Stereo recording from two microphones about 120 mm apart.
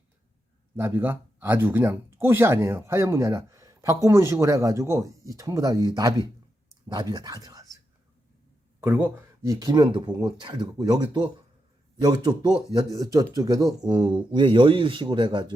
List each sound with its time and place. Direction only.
0.8 s speech: 20° right (ahead or behind)
9.4 s speech: 30° right (ahead or behind)